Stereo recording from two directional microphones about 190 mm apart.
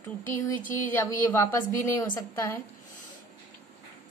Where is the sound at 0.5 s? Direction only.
45° left (ahead or behind).